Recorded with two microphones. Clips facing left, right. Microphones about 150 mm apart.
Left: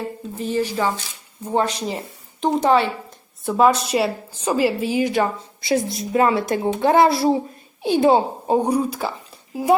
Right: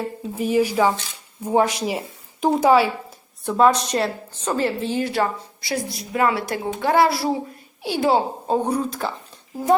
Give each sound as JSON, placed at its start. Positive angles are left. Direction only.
{"t": 0.3, "sound": "speech", "side_deg": -10}
{"t": 3.4, "sound": "a woman's voice", "side_deg": 5}